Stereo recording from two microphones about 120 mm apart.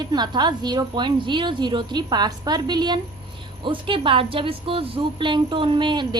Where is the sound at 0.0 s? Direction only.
35° right (ahead or behind).